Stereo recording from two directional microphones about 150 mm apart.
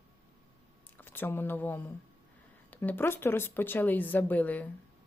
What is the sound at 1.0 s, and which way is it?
Speech, 15° left (ahead or behind).